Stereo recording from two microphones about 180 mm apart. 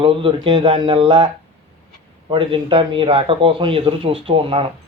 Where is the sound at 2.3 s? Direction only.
30° right (ahead or behind).